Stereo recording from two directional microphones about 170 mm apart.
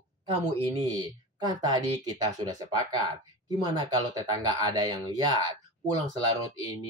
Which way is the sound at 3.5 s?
20° right (ahead or behind).